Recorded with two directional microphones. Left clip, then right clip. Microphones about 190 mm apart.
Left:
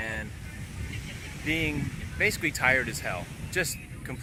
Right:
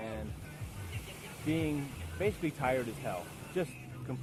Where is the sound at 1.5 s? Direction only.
10° left (ahead or behind).